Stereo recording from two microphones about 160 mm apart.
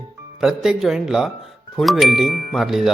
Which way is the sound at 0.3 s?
5° right (ahead or behind).